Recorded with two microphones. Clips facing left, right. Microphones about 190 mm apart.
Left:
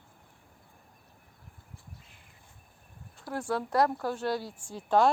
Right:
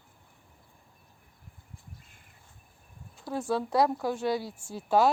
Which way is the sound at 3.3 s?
10° right (ahead or behind).